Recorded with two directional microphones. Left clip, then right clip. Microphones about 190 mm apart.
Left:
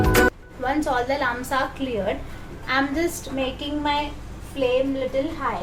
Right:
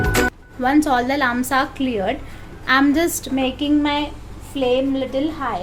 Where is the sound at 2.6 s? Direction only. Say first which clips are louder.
Right 6 dB; 60° right (ahead or behind).